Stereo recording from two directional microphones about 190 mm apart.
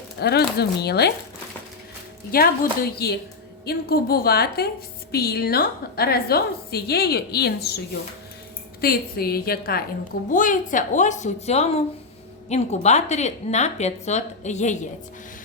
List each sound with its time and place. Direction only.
0.2 s a woman's voice: 60° left (ahead or behind)
2.3 s a woman's voice: 55° left (ahead or behind)
8.8 s a woman's voice: 55° left (ahead or behind)